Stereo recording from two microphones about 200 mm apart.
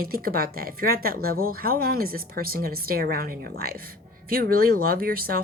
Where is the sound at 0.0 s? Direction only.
45° right (ahead or behind).